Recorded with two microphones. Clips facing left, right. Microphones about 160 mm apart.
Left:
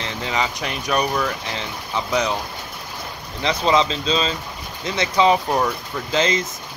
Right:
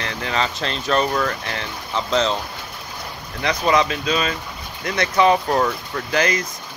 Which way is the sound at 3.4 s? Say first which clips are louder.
Even; 20° left (ahead or behind).